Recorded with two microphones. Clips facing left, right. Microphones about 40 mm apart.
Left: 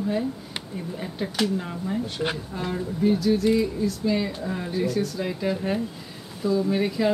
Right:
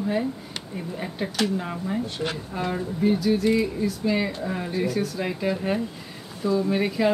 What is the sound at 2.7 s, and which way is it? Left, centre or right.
A woman's voice, centre.